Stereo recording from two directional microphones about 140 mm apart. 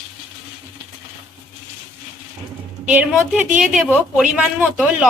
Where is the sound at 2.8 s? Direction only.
10° right (ahead or behind).